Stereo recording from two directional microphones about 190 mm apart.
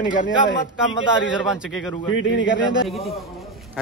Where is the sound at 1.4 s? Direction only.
Centre (ahead or behind).